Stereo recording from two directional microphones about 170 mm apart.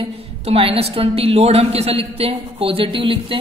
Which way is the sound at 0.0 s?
35° right (ahead or behind).